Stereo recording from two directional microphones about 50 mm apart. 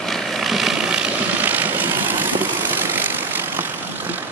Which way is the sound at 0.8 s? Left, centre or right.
Centre.